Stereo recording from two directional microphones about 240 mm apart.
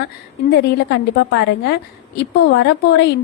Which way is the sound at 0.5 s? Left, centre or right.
Left.